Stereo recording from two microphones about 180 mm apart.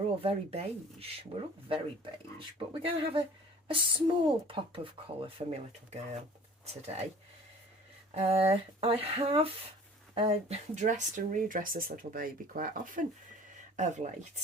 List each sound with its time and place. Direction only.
0.2 s speech: 35° right (ahead or behind)
8.1 s speech: 35° right (ahead or behind)